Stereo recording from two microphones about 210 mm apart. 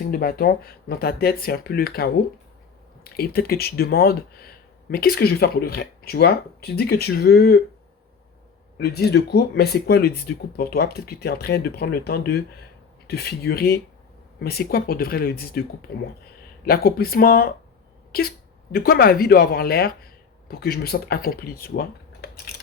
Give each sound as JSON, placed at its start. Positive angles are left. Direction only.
{"t": 0.1, "sound": "speech", "side_deg": 45}
{"t": 8.8, "sound": "speech", "side_deg": 50}